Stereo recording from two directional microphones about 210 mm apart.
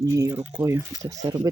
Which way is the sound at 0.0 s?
15° right (ahead or behind).